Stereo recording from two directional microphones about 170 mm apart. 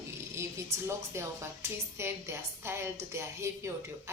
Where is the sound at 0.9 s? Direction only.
15° right (ahead or behind).